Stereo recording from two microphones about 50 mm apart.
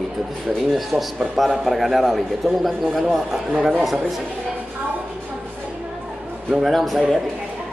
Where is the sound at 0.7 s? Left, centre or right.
Centre.